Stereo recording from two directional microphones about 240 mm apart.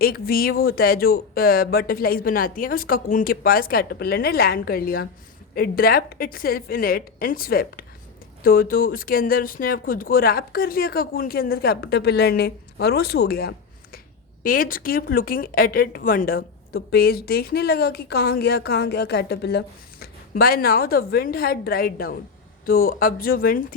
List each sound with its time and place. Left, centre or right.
0.0 s a woman's voice: left